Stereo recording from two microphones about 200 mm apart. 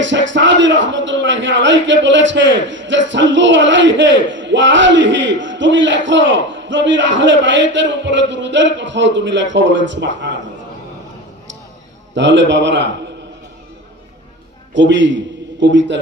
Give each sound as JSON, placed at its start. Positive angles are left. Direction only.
{"t": 0.0, "sound": "a man's voice", "side_deg": -65}
{"t": 12.1, "sound": "a man's voice", "side_deg": -65}
{"t": 14.7, "sound": "a man's voice", "side_deg": -65}